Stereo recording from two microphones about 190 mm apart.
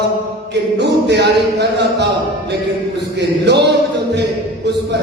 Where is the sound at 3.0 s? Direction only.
60° right (ahead or behind).